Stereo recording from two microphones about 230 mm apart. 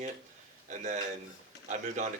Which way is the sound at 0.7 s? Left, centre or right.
Right.